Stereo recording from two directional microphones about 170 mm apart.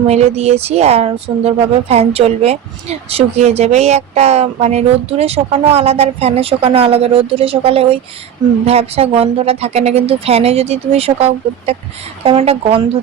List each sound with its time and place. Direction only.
0.1 s speech: 40° right (ahead or behind)